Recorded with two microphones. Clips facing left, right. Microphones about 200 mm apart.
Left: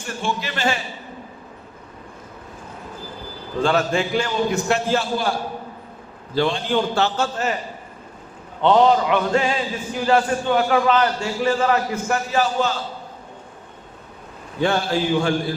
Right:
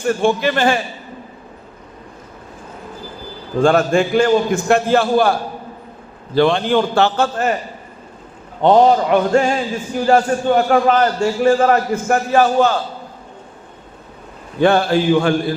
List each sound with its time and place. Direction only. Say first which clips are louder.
0.0 s a man's voice: right 11 dB; 55° right (ahead or behind)
3.6 s a man's voice: right 6 dB; 50° right (ahead or behind)
8.6 s a man's voice: right 4 dB; 40° right (ahead or behind)
14.6 s a man's voice: right 6 dB; 60° right (ahead or behind)